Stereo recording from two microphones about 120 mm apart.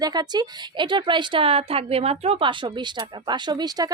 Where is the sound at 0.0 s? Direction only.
35° right (ahead or behind).